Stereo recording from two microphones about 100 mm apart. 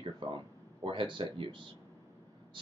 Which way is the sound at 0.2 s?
60° right (ahead or behind).